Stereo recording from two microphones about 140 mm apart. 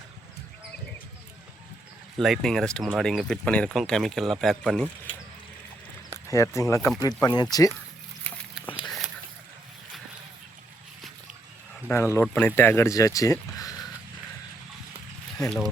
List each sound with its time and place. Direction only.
2.1 s speech: centre (ahead or behind)
6.2 s speech: 20° left (ahead or behind)
8.6 s a sound: 35° left (ahead or behind)
11.9 s speech: 15° left (ahead or behind)
15.4 s speech: 5° left (ahead or behind)